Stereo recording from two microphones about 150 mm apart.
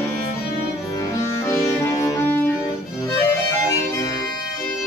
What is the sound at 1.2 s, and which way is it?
Music, 20° left (ahead or behind).